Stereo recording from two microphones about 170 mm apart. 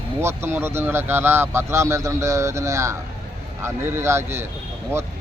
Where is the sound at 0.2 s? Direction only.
15° right (ahead or behind).